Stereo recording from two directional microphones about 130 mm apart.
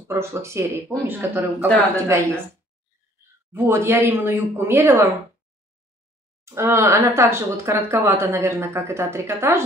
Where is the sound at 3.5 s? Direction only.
15° right (ahead or behind).